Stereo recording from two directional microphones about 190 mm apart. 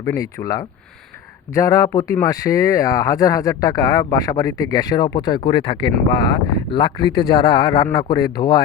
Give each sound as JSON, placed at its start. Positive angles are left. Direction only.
{"t": 0.0, "sound": "speech", "side_deg": 15}